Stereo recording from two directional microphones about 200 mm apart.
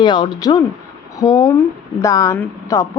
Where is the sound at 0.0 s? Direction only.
25° left (ahead or behind).